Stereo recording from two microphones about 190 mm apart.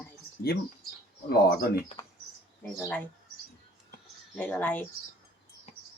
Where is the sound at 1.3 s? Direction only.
55° left (ahead or behind).